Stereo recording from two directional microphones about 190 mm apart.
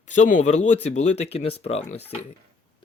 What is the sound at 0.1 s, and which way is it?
Speech, 40° left (ahead or behind).